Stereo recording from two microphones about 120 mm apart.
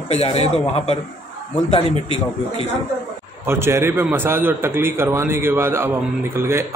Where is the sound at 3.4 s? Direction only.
20° right (ahead or behind).